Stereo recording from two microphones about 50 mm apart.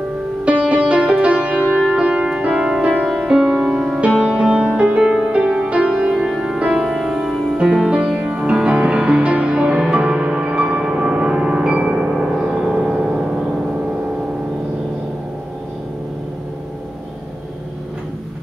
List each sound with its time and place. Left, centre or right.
0.5 s music: right
6.1 s music: centre